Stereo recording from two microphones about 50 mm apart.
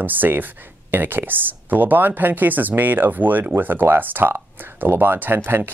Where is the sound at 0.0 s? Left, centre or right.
Right.